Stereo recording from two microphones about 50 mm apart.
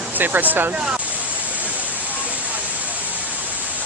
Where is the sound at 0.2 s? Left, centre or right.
Right.